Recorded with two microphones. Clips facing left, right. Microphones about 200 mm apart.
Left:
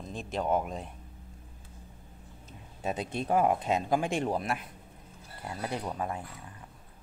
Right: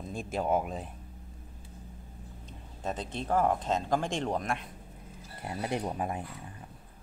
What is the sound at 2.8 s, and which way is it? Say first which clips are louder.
Speech: left 2 dB; 10° left (ahead or behind).